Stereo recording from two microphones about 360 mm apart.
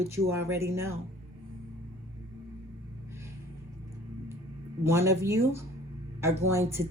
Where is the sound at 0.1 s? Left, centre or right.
Centre.